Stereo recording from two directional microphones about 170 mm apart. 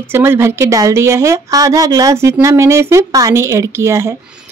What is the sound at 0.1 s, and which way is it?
Speech, 15° right (ahead or behind).